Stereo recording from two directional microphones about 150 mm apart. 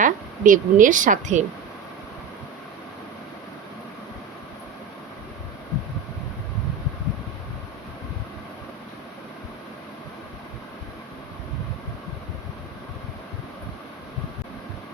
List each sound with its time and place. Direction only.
0.0 s speech: 60° right (ahead or behind)